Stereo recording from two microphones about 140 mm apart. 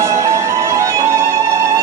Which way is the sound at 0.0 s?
20° right (ahead or behind).